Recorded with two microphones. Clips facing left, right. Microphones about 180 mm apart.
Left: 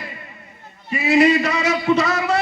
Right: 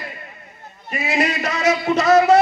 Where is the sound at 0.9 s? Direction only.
45° right (ahead or behind).